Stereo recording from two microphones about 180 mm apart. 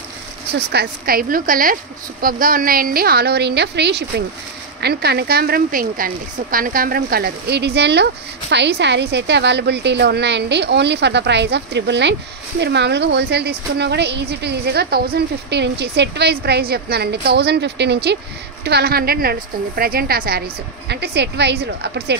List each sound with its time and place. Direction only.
0.7 s a woman's voice: 60° right (ahead or behind)
20.9 s speech: 70° right (ahead or behind)